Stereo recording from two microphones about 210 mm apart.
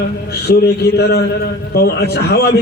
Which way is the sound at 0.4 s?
50° left (ahead or behind).